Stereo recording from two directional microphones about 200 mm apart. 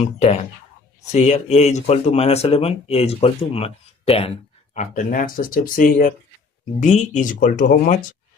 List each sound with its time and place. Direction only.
0.0 s speech: 30° left (ahead or behind)